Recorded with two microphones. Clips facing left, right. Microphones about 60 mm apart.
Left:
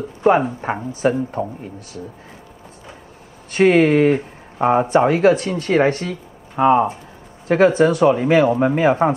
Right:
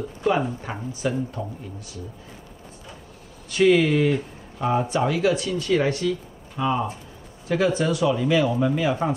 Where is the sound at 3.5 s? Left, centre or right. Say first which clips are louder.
Left 4 dB; left.